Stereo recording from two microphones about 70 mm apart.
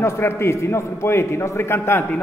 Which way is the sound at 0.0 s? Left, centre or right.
Left.